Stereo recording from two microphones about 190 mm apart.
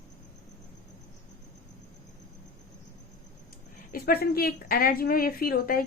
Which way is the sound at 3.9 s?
50° left (ahead or behind).